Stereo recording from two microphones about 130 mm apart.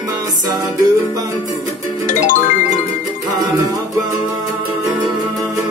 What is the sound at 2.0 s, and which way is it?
Music, 90° left.